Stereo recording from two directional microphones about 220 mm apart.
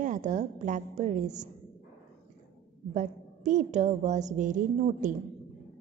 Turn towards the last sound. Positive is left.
turn(degrees=-35)  # may be behind; listen again after turning